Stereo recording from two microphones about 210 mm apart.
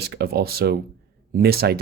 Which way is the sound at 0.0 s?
50° right (ahead or behind).